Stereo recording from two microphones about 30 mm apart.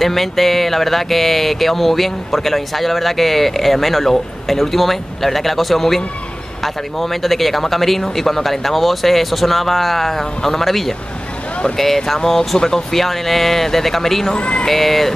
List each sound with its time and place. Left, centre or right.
0.0 s speech: centre
12.9 s speech: centre
14.3 s speech: left
14.7 s speech: centre